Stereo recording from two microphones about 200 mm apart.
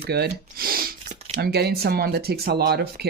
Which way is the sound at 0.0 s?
50° right (ahead or behind).